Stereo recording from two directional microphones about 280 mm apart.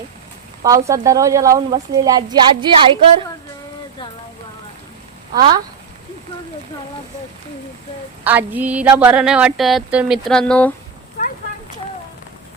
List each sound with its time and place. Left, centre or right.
0.6 s a woman's voice: centre
5.3 s a woman's voice: centre
8.2 s speech: centre
11.2 s a sound: left